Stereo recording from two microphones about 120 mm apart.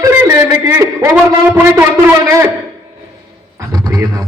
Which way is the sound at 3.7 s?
35° right (ahead or behind).